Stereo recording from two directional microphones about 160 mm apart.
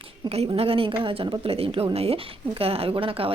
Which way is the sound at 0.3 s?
40° right (ahead or behind).